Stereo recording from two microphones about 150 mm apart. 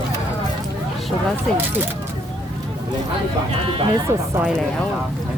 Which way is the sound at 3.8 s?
25° right (ahead or behind).